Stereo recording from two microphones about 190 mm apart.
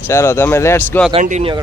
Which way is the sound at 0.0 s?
15° left (ahead or behind).